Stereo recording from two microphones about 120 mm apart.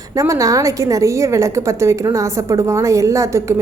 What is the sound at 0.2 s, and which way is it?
A woman's voice, 30° right (ahead or behind).